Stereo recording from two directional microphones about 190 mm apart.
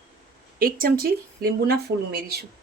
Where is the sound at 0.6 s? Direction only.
50° right (ahead or behind).